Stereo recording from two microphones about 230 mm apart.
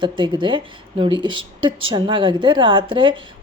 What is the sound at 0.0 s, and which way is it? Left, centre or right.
A woman's voice, right.